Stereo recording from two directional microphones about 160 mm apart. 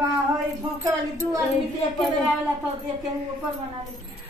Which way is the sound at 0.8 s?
20° right (ahead or behind).